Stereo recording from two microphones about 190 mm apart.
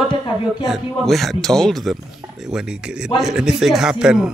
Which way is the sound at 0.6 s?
Centre (ahead or behind).